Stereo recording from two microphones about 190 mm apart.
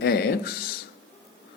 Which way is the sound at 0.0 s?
55° left (ahead or behind).